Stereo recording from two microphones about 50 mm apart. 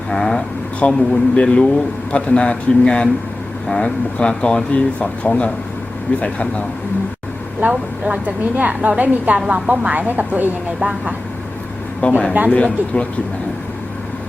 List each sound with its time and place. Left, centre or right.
0.1 s speech: centre
0.8 s speech: left
7.7 s a woman's voice: right
10.8 s speech: centre
12.0 s speech: left